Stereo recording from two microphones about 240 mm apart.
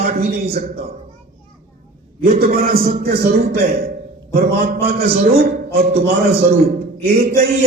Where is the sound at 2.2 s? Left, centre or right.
Right.